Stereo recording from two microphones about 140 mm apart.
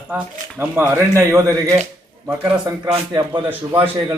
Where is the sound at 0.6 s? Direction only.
20° right (ahead or behind).